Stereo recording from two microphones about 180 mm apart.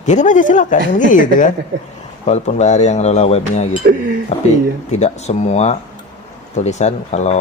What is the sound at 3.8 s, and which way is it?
Speech, 55° right (ahead or behind).